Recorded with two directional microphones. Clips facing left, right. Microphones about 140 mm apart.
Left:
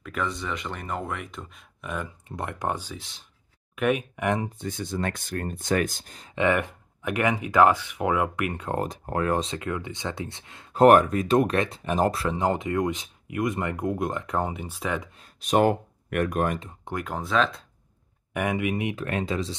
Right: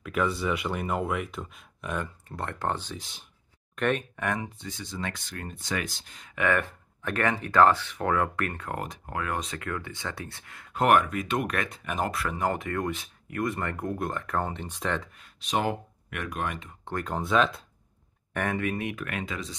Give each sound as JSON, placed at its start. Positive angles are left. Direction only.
{"t": 0.0, "sound": "speech", "side_deg": -5}
{"t": 2.2, "sound": "speech", "side_deg": 15}
{"t": 4.6, "sound": "speech", "side_deg": 50}
{"t": 6.3, "sound": "speech", "side_deg": 20}
{"t": 8.6, "sound": "speech", "side_deg": 35}
{"t": 15.4, "sound": "speech", "side_deg": 50}
{"t": 16.8, "sound": "speech", "side_deg": 5}
{"t": 18.3, "sound": "speech", "side_deg": 10}
{"t": 19.0, "sound": "speech", "side_deg": 30}